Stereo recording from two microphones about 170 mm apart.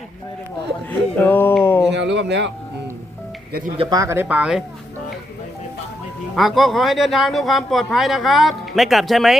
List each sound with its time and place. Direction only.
0.9 s a sound: 10° left (ahead or behind)
1.9 s speech: 90° right
3.8 s speech: 20° right (ahead or behind); by 4.6 s 5° right (ahead or behind)
6.3 s speech: centre (ahead or behind)